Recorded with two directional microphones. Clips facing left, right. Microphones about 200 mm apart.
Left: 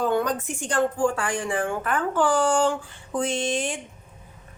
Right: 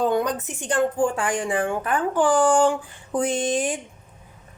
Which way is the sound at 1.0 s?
20° right (ahead or behind).